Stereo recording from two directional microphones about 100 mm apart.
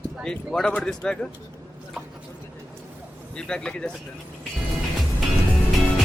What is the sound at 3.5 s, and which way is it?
Speech, 10° left (ahead or behind).